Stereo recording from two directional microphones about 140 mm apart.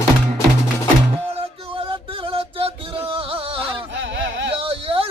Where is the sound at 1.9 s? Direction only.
40° right (ahead or behind).